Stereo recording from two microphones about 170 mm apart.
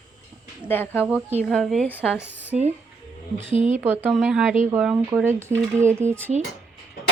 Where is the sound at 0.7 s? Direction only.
10° left (ahead or behind).